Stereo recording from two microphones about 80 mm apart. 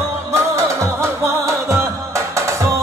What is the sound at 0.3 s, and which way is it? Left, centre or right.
Music, right.